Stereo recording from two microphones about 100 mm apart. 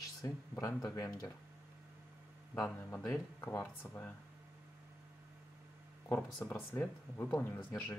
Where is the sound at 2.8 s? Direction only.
30° left (ahead or behind).